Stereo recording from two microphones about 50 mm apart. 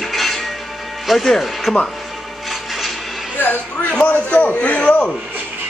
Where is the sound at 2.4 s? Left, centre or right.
Centre.